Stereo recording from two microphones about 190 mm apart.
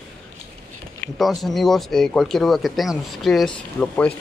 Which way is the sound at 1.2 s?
Centre (ahead or behind).